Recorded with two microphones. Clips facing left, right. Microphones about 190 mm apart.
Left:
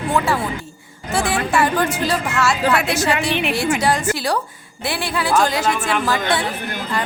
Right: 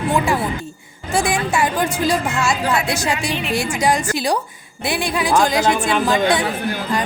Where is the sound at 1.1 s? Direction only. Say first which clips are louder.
Even; 15° right (ahead or behind).